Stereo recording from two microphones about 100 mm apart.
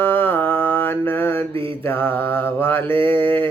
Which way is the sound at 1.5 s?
60° right (ahead or behind).